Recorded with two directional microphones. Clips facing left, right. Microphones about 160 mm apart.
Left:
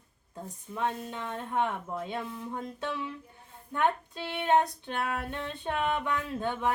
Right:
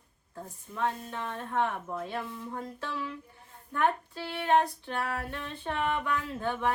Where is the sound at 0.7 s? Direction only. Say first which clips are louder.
Even; 20° left (ahead or behind).